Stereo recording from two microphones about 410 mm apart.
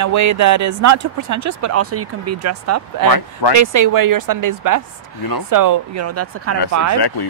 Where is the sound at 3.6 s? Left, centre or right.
Right.